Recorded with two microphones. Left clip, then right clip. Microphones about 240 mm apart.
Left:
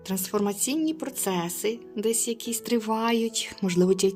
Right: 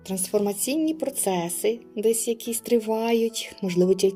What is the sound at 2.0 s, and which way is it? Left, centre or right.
A woman's voice, centre.